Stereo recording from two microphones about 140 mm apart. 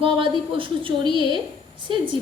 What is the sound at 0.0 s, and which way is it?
A woman's voice, 40° right (ahead or behind).